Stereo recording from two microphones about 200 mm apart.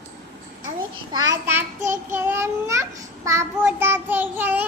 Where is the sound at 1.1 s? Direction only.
15° right (ahead or behind).